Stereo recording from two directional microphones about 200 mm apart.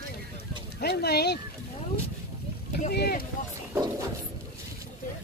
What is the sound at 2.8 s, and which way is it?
Speech, 50° left (ahead or behind).